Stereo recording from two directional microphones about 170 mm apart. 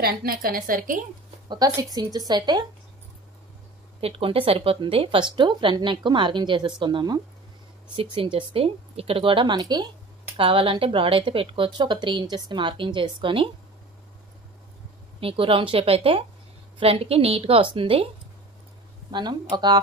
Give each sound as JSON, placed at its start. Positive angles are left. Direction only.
{"t": 0.0, "sound": "a woman's voice", "side_deg": -60}
{"t": 1.5, "sound": "speech", "side_deg": -20}
{"t": 4.0, "sound": "speech", "side_deg": -35}
{"t": 15.1, "sound": "speech", "side_deg": -35}
{"t": 19.1, "sound": "speech", "side_deg": -25}